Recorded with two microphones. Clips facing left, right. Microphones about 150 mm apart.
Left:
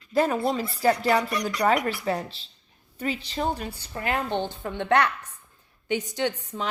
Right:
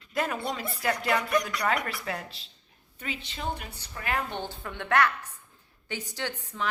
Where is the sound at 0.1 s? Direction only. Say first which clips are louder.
Left 7 dB; 30° left (ahead or behind).